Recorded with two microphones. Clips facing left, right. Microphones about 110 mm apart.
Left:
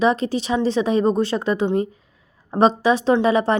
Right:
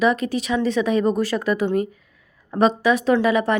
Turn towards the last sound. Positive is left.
turn(degrees=30)  # may be behind; listen again after turning